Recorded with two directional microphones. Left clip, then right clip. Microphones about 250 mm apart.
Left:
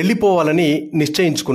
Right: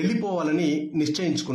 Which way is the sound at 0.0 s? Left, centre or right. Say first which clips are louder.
Left 11 dB; left.